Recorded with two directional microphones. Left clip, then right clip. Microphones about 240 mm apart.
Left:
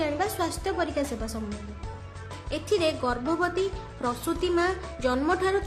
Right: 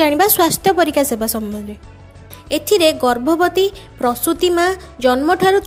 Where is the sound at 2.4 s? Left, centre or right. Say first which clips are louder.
Right 12 dB; right.